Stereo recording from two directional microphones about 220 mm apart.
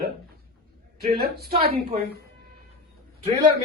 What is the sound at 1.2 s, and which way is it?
Speech, 45° right (ahead or behind).